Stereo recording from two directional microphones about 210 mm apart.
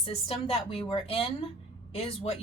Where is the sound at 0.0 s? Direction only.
30° left (ahead or behind).